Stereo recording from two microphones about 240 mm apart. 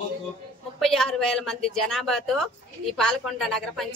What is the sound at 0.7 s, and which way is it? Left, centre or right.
A woman's voice, centre.